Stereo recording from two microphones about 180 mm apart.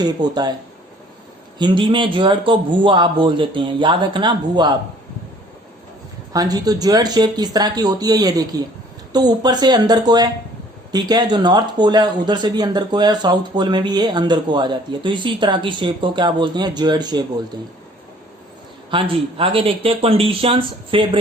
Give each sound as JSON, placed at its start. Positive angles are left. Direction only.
{"t": 0.0, "sound": "speech", "side_deg": -25}
{"t": 1.5, "sound": "speech", "side_deg": -25}
{"t": 6.3, "sound": "speech", "side_deg": -20}
{"t": 18.9, "sound": "speech", "side_deg": -30}